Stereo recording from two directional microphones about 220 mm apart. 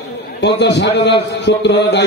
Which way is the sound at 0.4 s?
50° left (ahead or behind).